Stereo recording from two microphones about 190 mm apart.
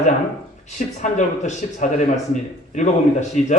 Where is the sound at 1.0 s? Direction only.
40° left (ahead or behind).